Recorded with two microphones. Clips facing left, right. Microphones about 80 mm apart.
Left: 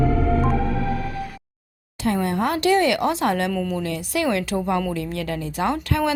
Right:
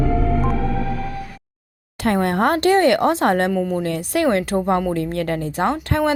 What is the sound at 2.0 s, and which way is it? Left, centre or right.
A woman's voice, right.